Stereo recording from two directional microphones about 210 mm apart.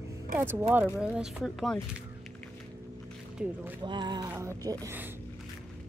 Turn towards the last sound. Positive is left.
turn(degrees=-10)  # may be behind; listen again after turning